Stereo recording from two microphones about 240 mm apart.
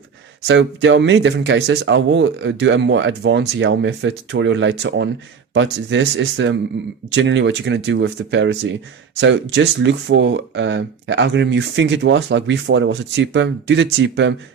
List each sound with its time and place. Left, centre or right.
0.4 s speech: right